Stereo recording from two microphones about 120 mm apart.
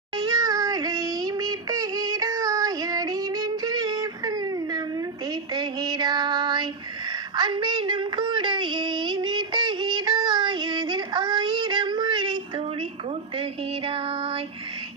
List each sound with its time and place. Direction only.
0.3 s child singing: 30° right (ahead or behind)
7.3 s female singing: 40° right (ahead or behind)